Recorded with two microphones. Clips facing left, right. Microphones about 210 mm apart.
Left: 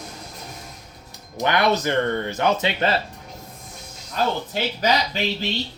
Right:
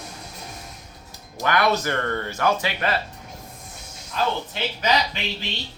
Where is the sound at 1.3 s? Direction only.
20° left (ahead or behind).